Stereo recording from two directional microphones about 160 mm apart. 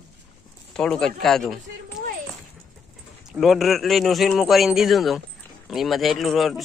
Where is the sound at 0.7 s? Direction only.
5° left (ahead or behind).